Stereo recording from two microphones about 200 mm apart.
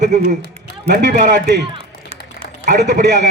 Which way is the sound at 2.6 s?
35° right (ahead or behind).